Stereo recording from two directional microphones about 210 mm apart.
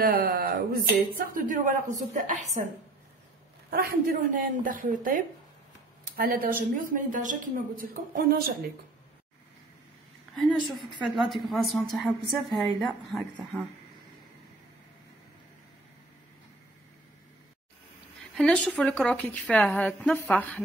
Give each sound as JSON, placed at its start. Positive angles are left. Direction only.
{"t": 0.0, "sound": "a woman's voice", "side_deg": -45}
{"t": 3.7, "sound": "a woman's voice", "side_deg": -45}
{"t": 10.3, "sound": "speech", "side_deg": 0}
{"t": 18.3, "sound": "speech", "side_deg": 5}